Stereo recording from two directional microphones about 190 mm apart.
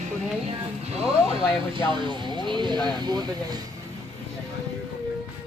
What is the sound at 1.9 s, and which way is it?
Speech, 25° right (ahead or behind).